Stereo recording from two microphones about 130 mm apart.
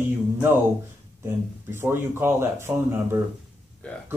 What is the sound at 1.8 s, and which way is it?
Speech, 15° right (ahead or behind).